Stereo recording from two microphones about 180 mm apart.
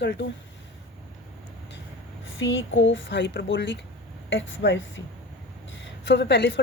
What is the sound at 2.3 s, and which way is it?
A woman's voice, 90° left.